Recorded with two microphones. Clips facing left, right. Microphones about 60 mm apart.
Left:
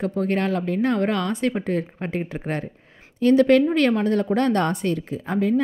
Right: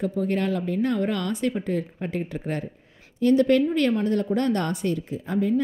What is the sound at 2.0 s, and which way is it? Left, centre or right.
Speech, left.